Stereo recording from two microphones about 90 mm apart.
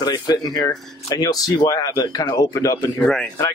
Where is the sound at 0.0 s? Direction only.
50° left (ahead or behind).